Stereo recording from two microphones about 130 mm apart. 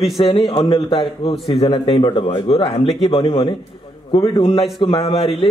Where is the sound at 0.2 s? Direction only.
45° left (ahead or behind).